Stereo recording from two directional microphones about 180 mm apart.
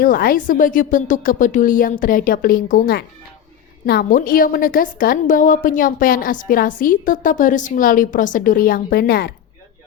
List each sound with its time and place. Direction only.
0.0 s a woman's voice: 55° left (ahead or behind)